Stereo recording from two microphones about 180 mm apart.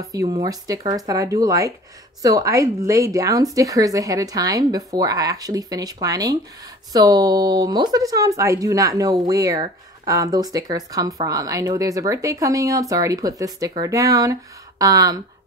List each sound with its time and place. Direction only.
0.1 s speech: 20° right (ahead or behind)